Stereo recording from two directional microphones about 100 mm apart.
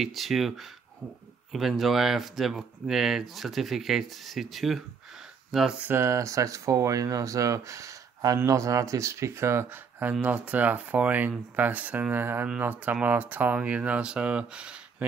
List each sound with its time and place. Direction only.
0.0 s speech: centre (ahead or behind)
5.8 s speech: 25° right (ahead or behind)